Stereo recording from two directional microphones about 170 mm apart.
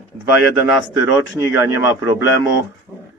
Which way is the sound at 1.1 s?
15° right (ahead or behind).